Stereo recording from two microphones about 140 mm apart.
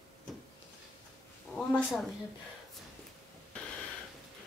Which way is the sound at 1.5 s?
Centre (ahead or behind).